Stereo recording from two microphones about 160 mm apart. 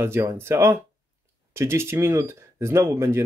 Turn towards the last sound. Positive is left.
turn(degrees=-15)  # may be behind; listen again after turning